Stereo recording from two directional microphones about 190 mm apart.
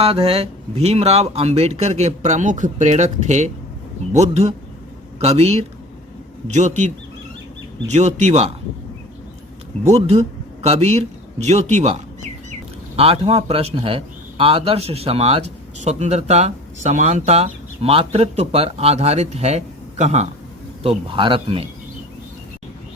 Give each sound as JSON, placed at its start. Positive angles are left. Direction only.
{"t": 0.0, "sound": "a man's voice", "side_deg": -30}
{"t": 9.9, "sound": "speech", "side_deg": -35}
{"t": 13.0, "sound": "a man's voice", "side_deg": -30}